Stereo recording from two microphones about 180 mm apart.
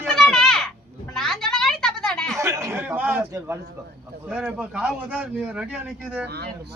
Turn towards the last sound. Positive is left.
turn(degrees=-65)  # may be behind; listen again after turning